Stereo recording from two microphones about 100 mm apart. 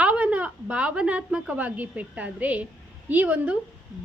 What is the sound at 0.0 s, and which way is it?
A woman's voice, 15° right (ahead or behind).